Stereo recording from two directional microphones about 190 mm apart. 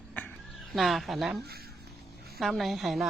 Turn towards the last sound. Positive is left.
turn(degrees=0)  # may be behind; listen again after turning